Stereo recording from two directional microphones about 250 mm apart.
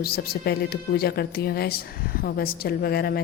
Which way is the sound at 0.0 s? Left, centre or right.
Left.